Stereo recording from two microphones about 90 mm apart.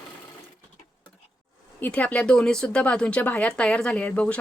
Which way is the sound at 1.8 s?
15° left (ahead or behind).